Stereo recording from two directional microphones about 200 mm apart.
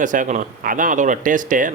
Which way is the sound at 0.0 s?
40° right (ahead or behind).